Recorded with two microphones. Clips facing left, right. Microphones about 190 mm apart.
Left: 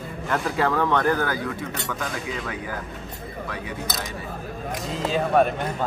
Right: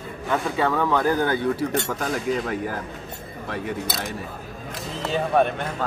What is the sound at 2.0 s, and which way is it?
Speech, 40° right (ahead or behind).